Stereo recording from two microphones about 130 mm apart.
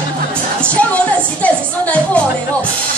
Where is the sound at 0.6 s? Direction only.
10° left (ahead or behind).